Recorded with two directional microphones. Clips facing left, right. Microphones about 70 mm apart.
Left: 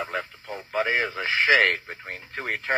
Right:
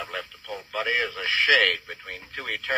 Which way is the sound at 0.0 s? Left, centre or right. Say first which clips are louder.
Left 4 dB; left.